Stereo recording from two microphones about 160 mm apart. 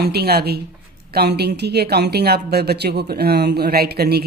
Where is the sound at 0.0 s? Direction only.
80° right.